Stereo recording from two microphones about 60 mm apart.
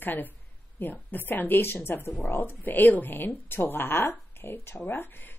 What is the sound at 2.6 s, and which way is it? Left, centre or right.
Speech, left.